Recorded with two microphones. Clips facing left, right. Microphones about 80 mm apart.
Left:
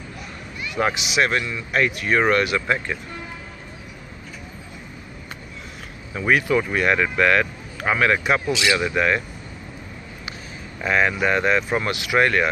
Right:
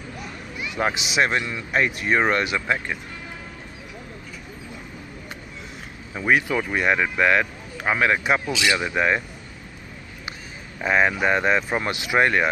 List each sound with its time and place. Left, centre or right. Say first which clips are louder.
0.6 s a sound: left 2 dB; centre
1.0 s speech: left 1 dB; right
6.1 s speech: left 2 dB; centre
10.8 s speech: even; right